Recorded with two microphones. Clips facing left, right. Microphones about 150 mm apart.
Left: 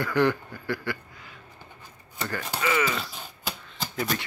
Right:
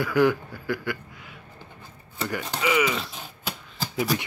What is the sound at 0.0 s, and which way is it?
A man's voice, 5° right (ahead or behind).